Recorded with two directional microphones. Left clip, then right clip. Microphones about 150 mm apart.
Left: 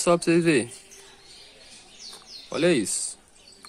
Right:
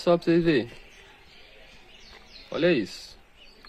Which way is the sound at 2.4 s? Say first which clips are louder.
Left 1 dB; 15° left (ahead or behind).